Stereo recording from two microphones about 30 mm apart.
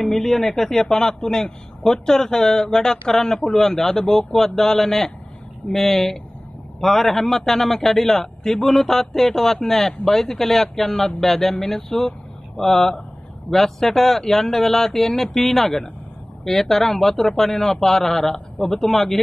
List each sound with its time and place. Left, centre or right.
0.0 s a man's voice: centre